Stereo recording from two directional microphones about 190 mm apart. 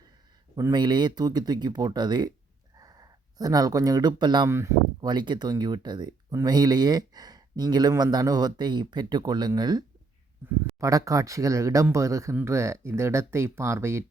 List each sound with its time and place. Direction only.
0.5 s speech: 20° right (ahead or behind)